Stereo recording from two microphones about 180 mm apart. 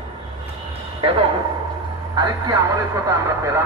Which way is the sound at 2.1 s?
20° right (ahead or behind).